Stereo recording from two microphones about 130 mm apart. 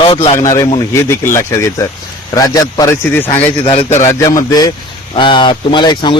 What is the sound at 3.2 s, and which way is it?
Speech, 45° left (ahead or behind).